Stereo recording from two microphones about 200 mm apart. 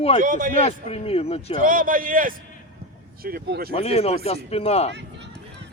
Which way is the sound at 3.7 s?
30° left (ahead or behind).